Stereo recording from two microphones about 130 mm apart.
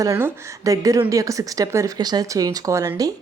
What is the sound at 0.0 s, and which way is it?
Speech, 25° right (ahead or behind).